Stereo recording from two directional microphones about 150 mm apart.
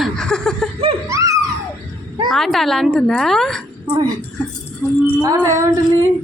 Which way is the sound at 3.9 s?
25° right (ahead or behind).